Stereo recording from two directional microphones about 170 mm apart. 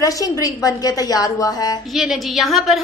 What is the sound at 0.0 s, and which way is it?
A woman's voice, 20° left (ahead or behind).